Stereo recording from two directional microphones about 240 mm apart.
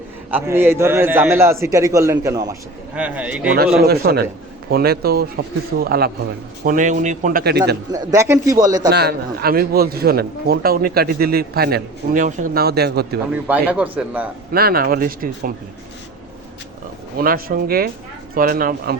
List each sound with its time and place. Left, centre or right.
0.3 s a man's voice: centre
3.8 s a man's voice: right
7.9 s a man's voice: centre
8.9 s a man's voice: right
13.5 s a man's voice: centre
14.5 s a man's voice: right
17.2 s a man's voice: right